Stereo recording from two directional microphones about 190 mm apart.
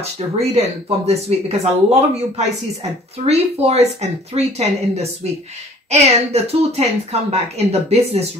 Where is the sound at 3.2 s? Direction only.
35° right (ahead or behind).